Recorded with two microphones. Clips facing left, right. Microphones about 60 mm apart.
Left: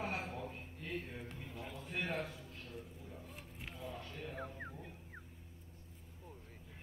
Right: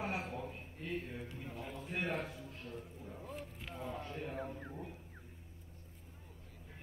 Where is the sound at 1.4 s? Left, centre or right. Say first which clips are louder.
Right 2 dB; right.